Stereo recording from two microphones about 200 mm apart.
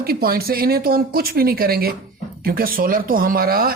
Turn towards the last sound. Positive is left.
turn(degrees=-50)  # may be behind; listen again after turning